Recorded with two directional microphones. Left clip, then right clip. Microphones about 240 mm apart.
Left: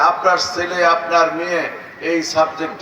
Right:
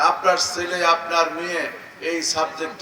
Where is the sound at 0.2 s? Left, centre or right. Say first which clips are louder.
Left 4 dB; right.